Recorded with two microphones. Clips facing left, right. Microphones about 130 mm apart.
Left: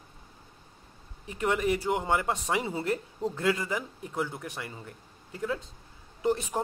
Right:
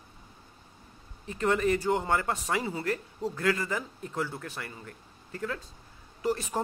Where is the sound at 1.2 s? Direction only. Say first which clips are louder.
Right 1 dB; 15° left (ahead or behind).